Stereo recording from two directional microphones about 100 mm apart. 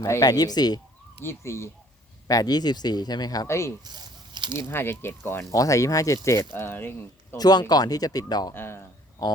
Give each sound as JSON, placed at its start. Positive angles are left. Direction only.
{"t": 0.0, "sound": "speech", "side_deg": 35}
{"t": 1.2, "sound": "speech", "side_deg": 25}
{"t": 2.2, "sound": "speech", "side_deg": 40}
{"t": 3.4, "sound": "speech", "side_deg": 30}
{"t": 3.8, "sound": "a sound", "side_deg": -45}
{"t": 4.5, "sound": "speech", "side_deg": 25}
{"t": 5.5, "sound": "speech", "side_deg": 35}
{"t": 7.3, "sound": "speech", "side_deg": 40}
{"t": 8.5, "sound": "speech", "side_deg": 25}